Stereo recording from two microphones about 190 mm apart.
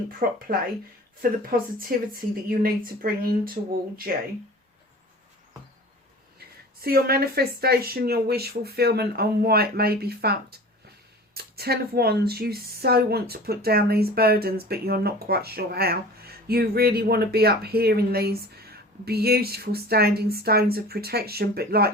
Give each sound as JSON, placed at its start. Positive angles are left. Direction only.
{"t": 0.2, "sound": "speech", "side_deg": -50}
{"t": 6.8, "sound": "speech", "side_deg": -55}